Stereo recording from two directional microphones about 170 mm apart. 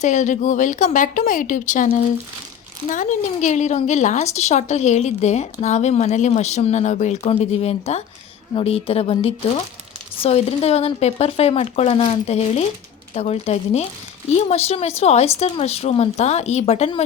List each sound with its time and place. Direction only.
0.0 s a woman's voice: 45° left (ahead or behind)
2.9 s a woman's voice: 45° left (ahead or behind)